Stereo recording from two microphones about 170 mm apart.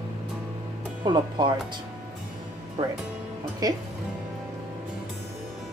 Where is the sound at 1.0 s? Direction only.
25° right (ahead or behind).